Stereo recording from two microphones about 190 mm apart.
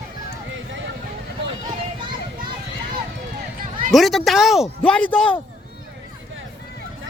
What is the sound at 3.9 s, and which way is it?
Speech, centre (ahead or behind).